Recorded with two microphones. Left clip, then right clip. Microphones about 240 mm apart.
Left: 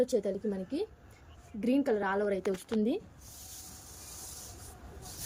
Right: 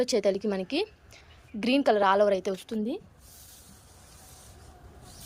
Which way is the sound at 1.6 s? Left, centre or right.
Centre.